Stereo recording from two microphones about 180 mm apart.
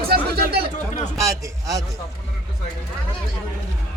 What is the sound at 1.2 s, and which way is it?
Speech, 20° right (ahead or behind).